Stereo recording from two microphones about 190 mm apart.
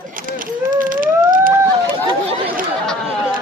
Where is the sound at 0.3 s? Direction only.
45° right (ahead or behind).